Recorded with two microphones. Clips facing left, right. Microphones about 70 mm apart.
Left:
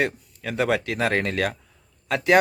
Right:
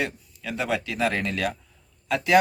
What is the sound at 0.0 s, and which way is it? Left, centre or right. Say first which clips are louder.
A man's voice: left 4 dB; left.